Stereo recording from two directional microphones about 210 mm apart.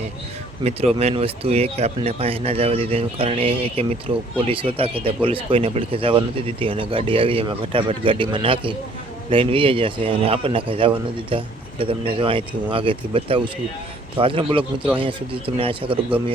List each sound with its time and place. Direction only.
0.9 s speech: 30° right (ahead or behind)